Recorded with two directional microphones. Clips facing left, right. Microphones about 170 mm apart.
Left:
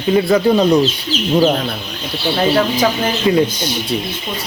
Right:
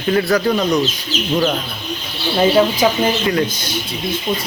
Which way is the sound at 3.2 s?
20° left (ahead or behind).